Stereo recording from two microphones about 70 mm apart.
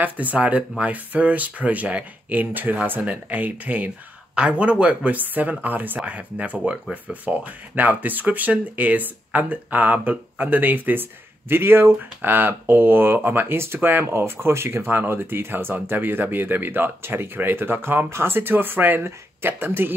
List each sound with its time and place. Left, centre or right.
0.0 s speech: right